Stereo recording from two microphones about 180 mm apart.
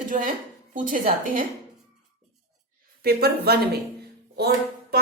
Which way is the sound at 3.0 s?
60° right (ahead or behind).